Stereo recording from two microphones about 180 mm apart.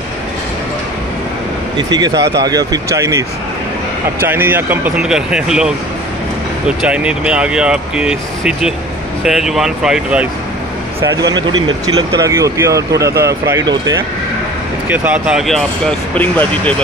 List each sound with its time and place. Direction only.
1.8 s speech: 20° right (ahead or behind)
2.1 s speech: 70° right (ahead or behind)
2.4 s speech: 20° right (ahead or behind); by 5.7 s 5° right (ahead or behind)
6.8 s speech: 5° right (ahead or behind)
11.0 s speech: 20° right (ahead or behind)
14.9 s speech: 5° right (ahead or behind)
16.2 s speech: 10° left (ahead or behind)